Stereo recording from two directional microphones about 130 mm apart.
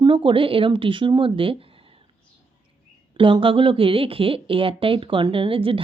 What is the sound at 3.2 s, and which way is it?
A woman's voice, 40° right (ahead or behind).